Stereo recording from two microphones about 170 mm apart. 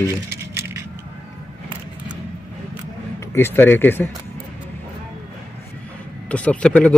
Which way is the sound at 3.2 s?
15° left (ahead or behind).